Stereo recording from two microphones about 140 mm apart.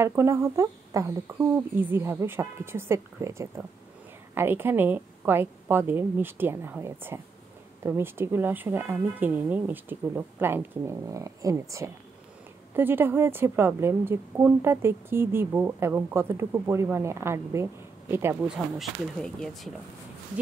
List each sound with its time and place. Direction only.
0.0 s a woman's voice: 20° right (ahead or behind)
18.8 s speech: centre (ahead or behind)